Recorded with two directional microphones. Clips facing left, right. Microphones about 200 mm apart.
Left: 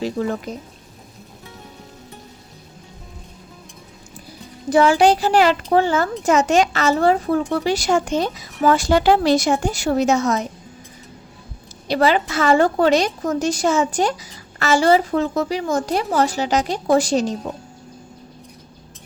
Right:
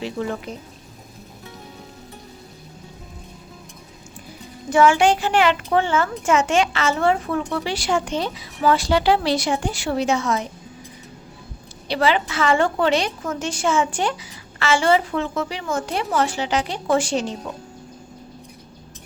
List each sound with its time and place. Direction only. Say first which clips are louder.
0.0 s a child's voice: left 4 dB; 40° left (ahead or behind)
4.7 s a child's voice: left 2 dB; 35° left (ahead or behind)
11.9 s a child's voice: left 3 dB; 40° left (ahead or behind)